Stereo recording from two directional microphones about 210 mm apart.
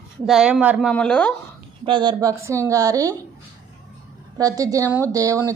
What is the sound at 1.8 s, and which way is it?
A woman's voice, 20° right (ahead or behind).